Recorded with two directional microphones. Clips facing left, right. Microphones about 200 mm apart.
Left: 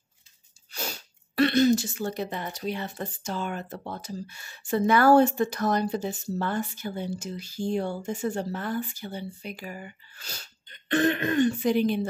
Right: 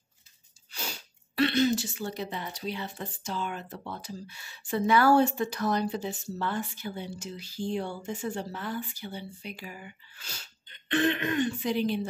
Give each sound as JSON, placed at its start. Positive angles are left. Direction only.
{"t": 1.3, "sound": "speech", "side_deg": 45}